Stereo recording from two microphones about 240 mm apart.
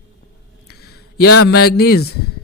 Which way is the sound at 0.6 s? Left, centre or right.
Left.